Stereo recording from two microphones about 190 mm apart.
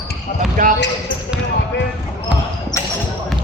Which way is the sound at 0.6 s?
45° right (ahead or behind).